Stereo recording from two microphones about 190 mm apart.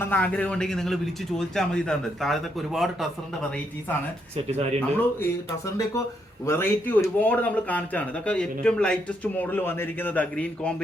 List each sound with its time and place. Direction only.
0.0 s a man's voice: 10° left (ahead or behind)
4.4 s speech: 35° right (ahead or behind)
5.2 s a man's voice: 15° left (ahead or behind)